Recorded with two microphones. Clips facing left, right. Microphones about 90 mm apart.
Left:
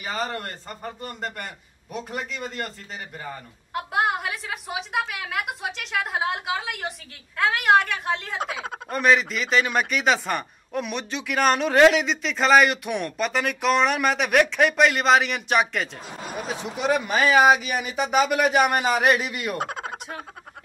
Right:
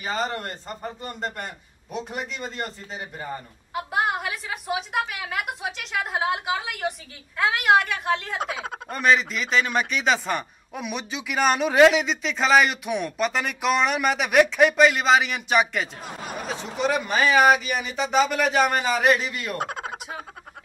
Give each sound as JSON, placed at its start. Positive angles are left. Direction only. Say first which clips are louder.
{"t": 0.0, "sound": "a man's voice", "louder": "right 2 dB", "side_deg": -25}
{"t": 1.9, "sound": "a woman's voice", "louder": "right 1 dB", "side_deg": 5}
{"t": 3.7, "sound": "a woman's voice", "louder": "left 1 dB", "side_deg": 0}